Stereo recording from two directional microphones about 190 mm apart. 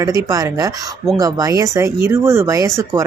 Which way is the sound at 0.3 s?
20° right (ahead or behind).